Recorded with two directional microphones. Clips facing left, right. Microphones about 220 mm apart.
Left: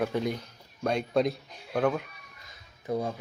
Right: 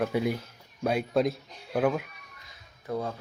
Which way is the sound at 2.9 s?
15° left (ahead or behind).